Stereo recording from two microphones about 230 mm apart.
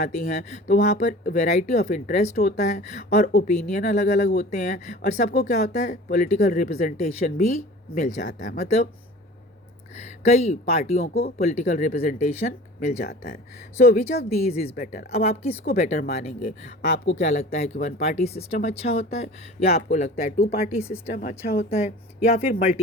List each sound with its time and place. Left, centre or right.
0.0 s speech: left
9.9 s speech: left
13.1 s speech: left
13.7 s speech: left